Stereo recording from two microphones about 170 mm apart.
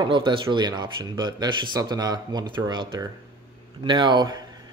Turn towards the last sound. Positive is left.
turn(degrees=-25)  # may be behind; listen again after turning